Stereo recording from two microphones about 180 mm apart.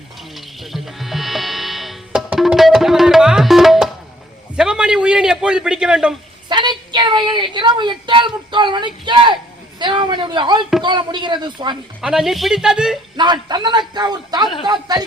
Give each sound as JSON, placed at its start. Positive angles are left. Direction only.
{"t": 0.3, "sound": "music", "side_deg": 0}
{"t": 4.5, "sound": "a sound", "side_deg": -5}
{"t": 6.5, "sound": "a woman's voice", "side_deg": -25}
{"t": 12.0, "sound": "speech", "side_deg": 0}
{"t": 13.1, "sound": "a man's voice", "side_deg": -25}